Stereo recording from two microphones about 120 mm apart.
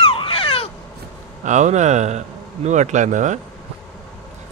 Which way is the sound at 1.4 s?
80° right.